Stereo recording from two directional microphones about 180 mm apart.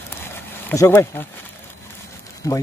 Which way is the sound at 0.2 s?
15° left (ahead or behind).